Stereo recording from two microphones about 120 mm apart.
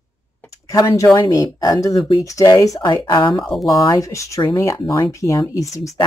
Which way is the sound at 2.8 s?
40° left (ahead or behind).